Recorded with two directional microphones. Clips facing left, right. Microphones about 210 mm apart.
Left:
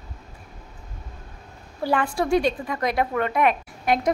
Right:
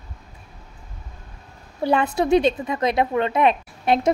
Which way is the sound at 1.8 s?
20° right (ahead or behind).